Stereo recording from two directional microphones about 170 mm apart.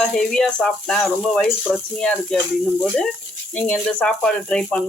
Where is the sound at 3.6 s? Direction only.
5° left (ahead or behind).